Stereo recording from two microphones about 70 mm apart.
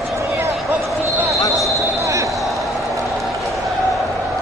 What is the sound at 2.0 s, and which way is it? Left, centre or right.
Basketball bounce, right.